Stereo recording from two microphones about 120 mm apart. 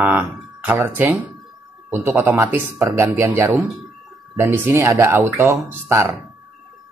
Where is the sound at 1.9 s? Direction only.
15° right (ahead or behind).